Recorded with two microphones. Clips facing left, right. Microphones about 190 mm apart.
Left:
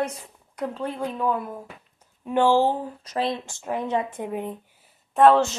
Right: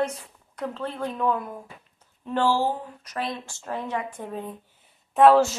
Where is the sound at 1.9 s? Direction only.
15° left (ahead or behind).